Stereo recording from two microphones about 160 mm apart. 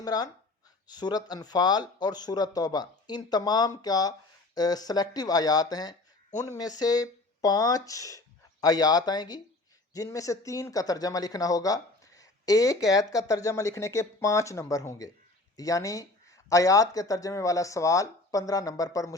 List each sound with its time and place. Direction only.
0.0 s speech: 25° left (ahead or behind)